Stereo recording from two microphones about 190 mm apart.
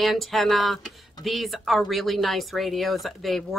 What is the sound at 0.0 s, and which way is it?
Speech, centre (ahead or behind).